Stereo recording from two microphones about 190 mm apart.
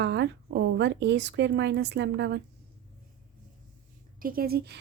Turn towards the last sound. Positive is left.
turn(degrees=-55)  # may be behind; listen again after turning